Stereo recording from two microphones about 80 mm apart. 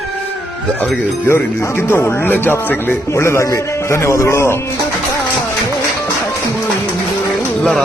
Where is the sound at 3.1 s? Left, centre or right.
Left.